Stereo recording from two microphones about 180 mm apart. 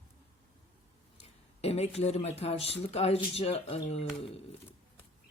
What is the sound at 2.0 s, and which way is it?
Speech, 35° left (ahead or behind).